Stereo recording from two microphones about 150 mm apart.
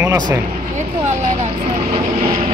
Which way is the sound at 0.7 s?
50° right (ahead or behind).